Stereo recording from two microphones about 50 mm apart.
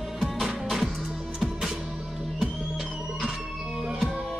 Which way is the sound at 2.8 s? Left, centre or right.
Centre.